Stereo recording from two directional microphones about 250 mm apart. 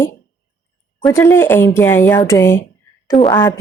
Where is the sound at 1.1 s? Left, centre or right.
Centre.